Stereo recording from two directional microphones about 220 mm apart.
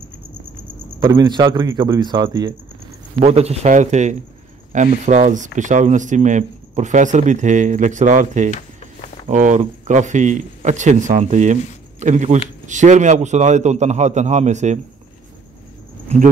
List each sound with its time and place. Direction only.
0.9 s a man's voice: 20° right (ahead or behind)
3.2 s speech: 30° right (ahead or behind)